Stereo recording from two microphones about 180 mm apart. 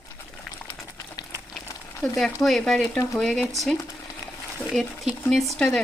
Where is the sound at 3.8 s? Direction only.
20° left (ahead or behind).